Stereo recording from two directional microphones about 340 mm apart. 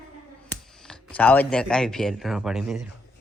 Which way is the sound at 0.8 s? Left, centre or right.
Centre.